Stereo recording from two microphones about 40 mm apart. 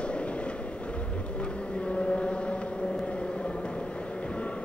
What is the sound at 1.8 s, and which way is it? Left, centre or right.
Vehicle, left.